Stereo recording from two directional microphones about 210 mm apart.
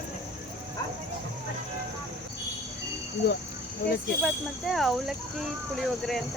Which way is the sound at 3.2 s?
50° left (ahead or behind).